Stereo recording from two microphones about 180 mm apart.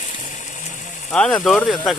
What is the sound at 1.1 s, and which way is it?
Speech, 5° left (ahead or behind).